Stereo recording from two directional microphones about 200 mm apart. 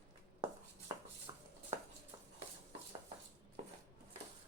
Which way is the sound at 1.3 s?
20° right (ahead or behind).